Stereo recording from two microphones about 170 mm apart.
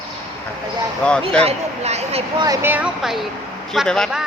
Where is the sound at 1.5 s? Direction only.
40° right (ahead or behind).